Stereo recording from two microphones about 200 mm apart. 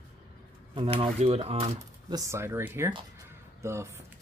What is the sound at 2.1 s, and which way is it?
Speech, 15° right (ahead or behind).